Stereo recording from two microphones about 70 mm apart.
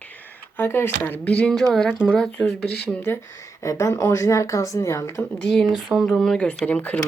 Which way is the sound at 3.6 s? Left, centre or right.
Left.